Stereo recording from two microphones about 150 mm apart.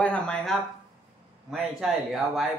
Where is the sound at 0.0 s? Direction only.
5° left (ahead or behind).